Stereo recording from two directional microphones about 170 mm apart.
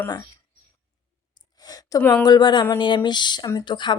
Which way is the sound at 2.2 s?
25° left (ahead or behind).